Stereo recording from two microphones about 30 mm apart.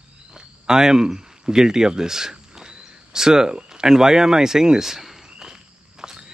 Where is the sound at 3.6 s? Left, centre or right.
Centre.